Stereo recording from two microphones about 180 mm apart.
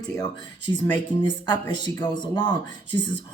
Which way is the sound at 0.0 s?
25° left (ahead or behind).